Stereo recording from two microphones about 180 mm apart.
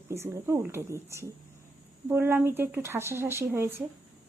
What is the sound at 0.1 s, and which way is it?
Speech, 15° right (ahead or behind).